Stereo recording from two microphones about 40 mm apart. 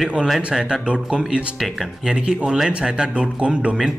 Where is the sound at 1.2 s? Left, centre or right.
Centre.